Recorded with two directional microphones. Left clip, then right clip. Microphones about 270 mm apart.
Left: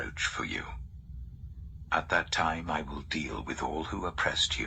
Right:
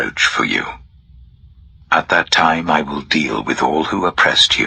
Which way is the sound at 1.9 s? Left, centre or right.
Right.